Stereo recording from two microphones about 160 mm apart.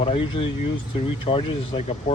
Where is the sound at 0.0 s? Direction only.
35° left (ahead or behind).